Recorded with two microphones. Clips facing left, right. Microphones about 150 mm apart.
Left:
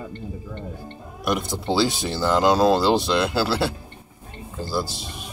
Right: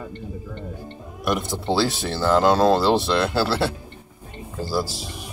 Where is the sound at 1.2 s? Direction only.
Centre (ahead or behind).